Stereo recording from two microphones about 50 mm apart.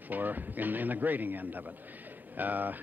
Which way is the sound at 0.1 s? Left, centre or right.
Right.